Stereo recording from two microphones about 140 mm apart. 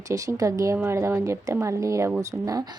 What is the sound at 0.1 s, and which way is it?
A woman's voice, 25° right (ahead or behind).